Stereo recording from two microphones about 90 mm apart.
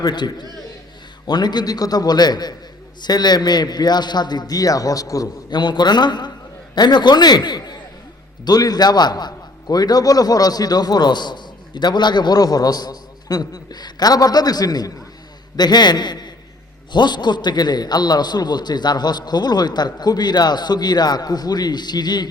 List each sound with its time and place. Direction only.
0.0 s a man's voice: 50° left (ahead or behind)
5.5 s a man's voice: 55° left (ahead or behind)